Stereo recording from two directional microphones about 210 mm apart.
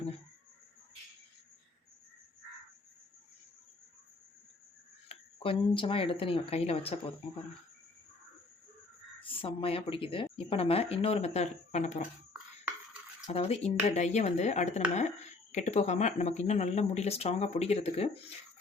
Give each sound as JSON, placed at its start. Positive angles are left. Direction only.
{"t": 5.0, "sound": "speech", "side_deg": 25}
{"t": 9.2, "sound": "speech", "side_deg": 25}
{"t": 13.2, "sound": "speech", "side_deg": 30}